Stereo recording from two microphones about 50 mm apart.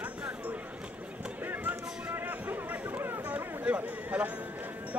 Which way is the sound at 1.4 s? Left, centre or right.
Right.